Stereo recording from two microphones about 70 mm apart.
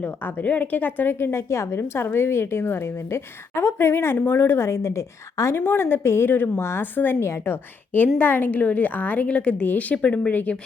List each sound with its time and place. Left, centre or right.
0.0 s a woman's voice: left